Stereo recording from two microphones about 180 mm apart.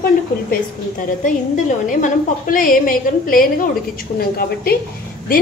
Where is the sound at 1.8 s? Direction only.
50° left (ahead or behind).